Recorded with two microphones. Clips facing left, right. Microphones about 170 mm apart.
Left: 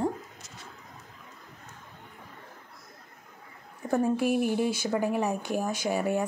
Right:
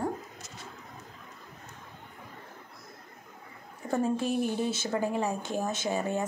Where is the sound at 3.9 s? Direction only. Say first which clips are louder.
Left 3 dB; 15° left (ahead or behind).